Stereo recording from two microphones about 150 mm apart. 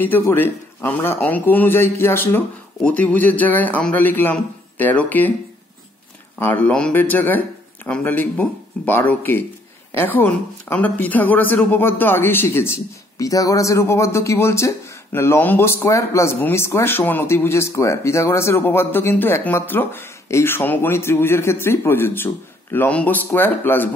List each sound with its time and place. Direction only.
0.0 s speech: 15° left (ahead or behind)
6.4 s speech: 10° left (ahead or behind)